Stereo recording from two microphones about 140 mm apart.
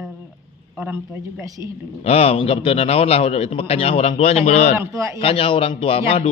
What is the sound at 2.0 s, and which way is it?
A man's voice, 45° left (ahead or behind).